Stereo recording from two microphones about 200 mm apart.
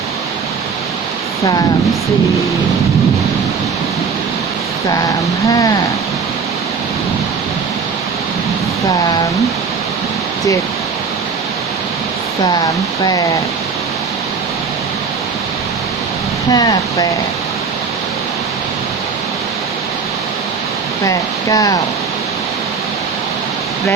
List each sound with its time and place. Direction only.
5.5 s speech: 15° left (ahead or behind)
16.5 s speech: 20° left (ahead or behind)
21.0 s speech: 15° left (ahead or behind)